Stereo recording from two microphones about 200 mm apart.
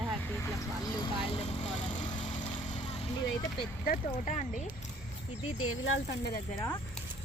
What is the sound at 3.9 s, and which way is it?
Speech, 35° left (ahead or behind).